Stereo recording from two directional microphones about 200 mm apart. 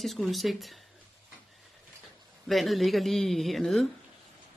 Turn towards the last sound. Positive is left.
turn(degrees=0)  # may be behind; listen again after turning